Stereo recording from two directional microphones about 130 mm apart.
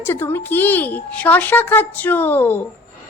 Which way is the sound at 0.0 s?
20° left (ahead or behind).